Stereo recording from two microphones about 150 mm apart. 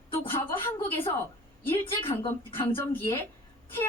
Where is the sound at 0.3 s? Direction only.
15° left (ahead or behind).